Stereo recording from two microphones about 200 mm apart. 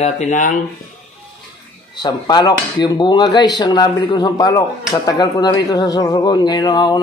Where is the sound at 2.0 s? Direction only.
20° left (ahead or behind).